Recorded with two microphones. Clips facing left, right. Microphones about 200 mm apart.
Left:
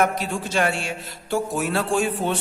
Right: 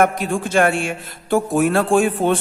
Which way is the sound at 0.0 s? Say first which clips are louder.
Right 5 dB; 50° right (ahead or behind).